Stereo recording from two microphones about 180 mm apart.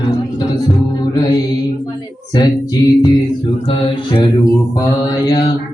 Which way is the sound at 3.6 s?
25° left (ahead or behind).